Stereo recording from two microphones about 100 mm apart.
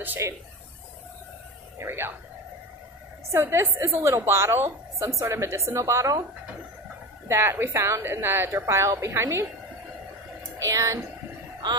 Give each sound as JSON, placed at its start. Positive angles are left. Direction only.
{"t": 0.2, "sound": "speech", "side_deg": -30}
{"t": 1.8, "sound": "a woman's voice", "side_deg": -25}
{"t": 3.3, "sound": "a woman's voice", "side_deg": -25}
{"t": 7.2, "sound": "a woman's voice", "side_deg": -25}
{"t": 10.6, "sound": "speech", "side_deg": -35}